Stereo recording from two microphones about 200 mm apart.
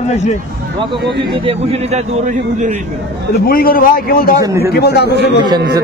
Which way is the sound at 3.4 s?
45° left (ahead or behind).